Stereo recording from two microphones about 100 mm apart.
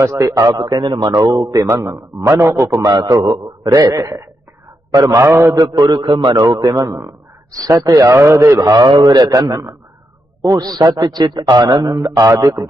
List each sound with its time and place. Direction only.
0.0 s a man's voice: 35° right (ahead or behind)
5.0 s mantra: 25° right (ahead or behind)
5.5 s a man's voice: 45° right (ahead or behind); by 8.5 s 30° right (ahead or behind)
8.6 s a man's voice: 40° right (ahead or behind)